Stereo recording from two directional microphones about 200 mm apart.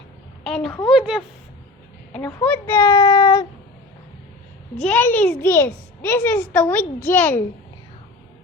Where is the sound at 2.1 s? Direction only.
10° left (ahead or behind).